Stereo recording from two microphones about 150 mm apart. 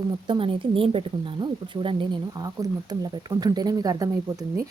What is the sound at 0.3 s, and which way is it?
Speech, 35° right (ahead or behind).